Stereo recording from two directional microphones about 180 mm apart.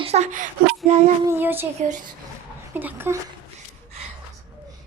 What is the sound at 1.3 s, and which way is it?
Speech, 10° right (ahead or behind).